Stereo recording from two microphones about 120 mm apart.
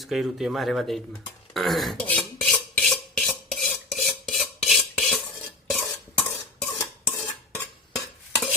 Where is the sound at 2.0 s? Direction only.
10° left (ahead or behind).